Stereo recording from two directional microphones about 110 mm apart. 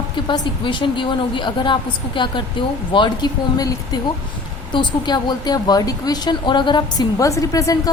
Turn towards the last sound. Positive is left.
turn(degrees=30)  # may be behind; listen again after turning